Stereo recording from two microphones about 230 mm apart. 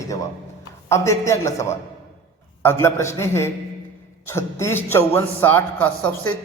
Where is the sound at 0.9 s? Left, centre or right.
Centre.